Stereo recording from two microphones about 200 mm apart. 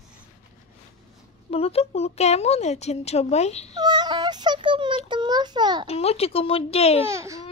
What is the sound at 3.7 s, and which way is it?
A child's voice, 20° right (ahead or behind).